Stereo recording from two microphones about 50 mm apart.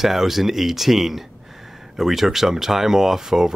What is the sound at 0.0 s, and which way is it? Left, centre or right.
Speech, centre.